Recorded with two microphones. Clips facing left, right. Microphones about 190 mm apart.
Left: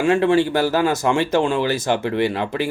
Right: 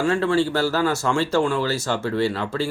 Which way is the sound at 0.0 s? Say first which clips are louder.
Left 4 dB; 20° left (ahead or behind).